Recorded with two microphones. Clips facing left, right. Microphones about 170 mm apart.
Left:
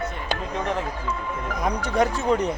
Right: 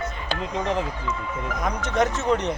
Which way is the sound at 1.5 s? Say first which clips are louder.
Left 3 dB; 35° left (ahead or behind).